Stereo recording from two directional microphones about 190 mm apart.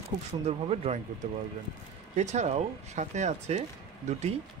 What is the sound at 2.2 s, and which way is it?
Speech, 35° right (ahead or behind).